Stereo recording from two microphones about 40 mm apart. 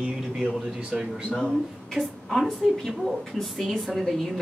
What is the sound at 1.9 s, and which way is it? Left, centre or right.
Speech, centre.